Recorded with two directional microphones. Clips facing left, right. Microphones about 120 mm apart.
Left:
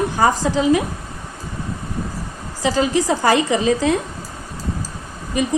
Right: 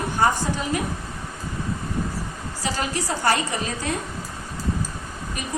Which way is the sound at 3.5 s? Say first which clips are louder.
Left 10 dB; 90° left.